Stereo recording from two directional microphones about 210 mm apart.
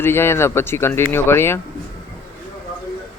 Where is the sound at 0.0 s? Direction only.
10° left (ahead or behind).